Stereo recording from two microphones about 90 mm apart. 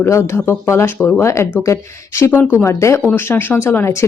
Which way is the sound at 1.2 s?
30° left (ahead or behind).